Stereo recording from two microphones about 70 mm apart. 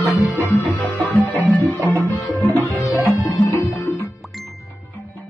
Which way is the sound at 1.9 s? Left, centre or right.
Left.